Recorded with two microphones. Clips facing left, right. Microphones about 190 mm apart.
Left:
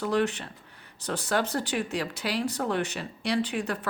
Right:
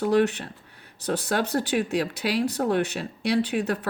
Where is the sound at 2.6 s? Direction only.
40° right (ahead or behind).